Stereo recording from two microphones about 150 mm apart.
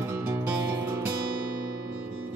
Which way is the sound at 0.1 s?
20° right (ahead or behind).